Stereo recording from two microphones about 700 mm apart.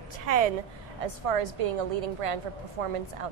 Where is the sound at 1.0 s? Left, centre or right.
Right.